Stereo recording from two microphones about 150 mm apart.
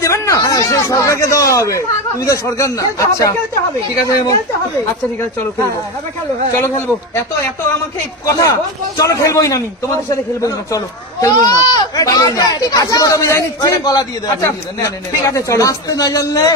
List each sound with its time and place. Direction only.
0.0 s speech: 20° left (ahead or behind)
8.3 s speech: 20° left (ahead or behind)